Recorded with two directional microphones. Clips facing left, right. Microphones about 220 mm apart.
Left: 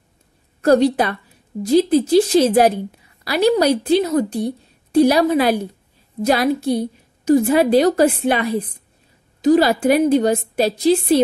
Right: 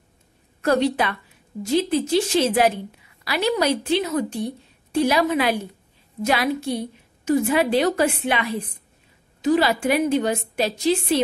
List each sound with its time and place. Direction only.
0.6 s a woman's voice: 40° left (ahead or behind)